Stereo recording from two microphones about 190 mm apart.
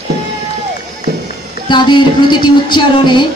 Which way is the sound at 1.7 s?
25° left (ahead or behind).